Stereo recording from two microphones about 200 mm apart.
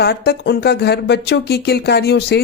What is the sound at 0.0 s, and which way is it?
Speech, 55° left (ahead or behind).